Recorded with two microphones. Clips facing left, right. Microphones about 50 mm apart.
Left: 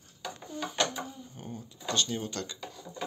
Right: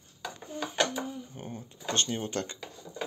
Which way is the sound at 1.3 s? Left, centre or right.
Right.